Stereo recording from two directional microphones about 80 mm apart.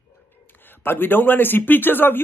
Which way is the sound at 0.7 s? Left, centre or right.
Left.